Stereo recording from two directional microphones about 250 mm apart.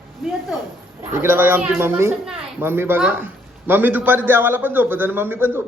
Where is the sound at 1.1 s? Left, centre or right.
Centre.